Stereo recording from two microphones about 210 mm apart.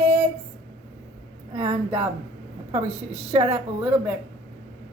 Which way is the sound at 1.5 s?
20° right (ahead or behind).